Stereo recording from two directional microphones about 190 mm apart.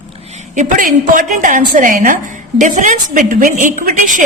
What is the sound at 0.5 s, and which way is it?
A woman's voice, 45° right (ahead or behind).